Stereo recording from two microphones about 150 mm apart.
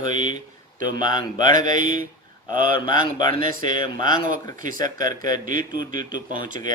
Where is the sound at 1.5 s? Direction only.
60° right (ahead or behind).